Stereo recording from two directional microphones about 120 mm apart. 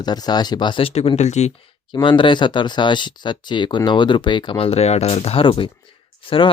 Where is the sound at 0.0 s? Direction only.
35° left (ahead or behind); by 1.5 s 70° left (ahead or behind).